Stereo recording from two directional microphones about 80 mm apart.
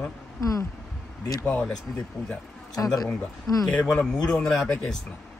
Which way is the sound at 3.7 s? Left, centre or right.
Centre.